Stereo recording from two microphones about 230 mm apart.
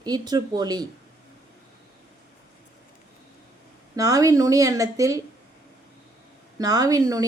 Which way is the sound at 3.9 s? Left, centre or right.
Centre.